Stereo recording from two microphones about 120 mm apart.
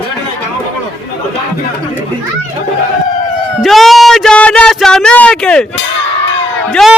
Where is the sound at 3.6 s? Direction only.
Centre (ahead or behind).